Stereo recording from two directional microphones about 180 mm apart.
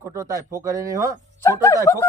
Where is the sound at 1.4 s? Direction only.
15° left (ahead or behind).